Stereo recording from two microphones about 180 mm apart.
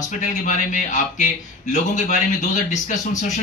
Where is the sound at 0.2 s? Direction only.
40° left (ahead or behind).